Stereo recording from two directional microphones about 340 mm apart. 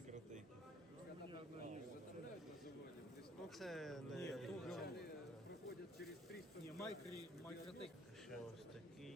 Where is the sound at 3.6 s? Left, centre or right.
Centre.